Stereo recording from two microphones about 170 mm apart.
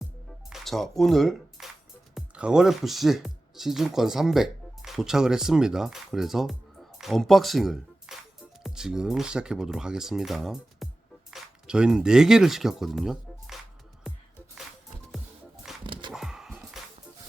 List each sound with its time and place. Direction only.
0.5 s speech: centre (ahead or behind)
15.8 s dog: 30° right (ahead or behind)
16.1 s dog: 5° right (ahead or behind)